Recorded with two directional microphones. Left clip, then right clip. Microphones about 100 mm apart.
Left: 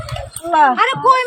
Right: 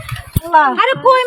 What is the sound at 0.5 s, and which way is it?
Speech, 30° left (ahead or behind).